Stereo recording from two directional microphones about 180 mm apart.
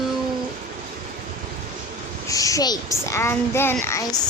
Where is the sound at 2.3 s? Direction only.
20° left (ahead or behind).